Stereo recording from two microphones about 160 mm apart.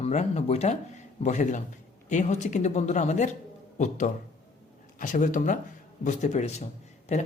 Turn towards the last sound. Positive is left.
turn(degrees=45)  # may be behind; listen again after turning